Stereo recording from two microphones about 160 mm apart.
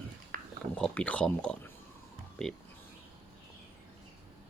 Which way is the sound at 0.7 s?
5° left (ahead or behind).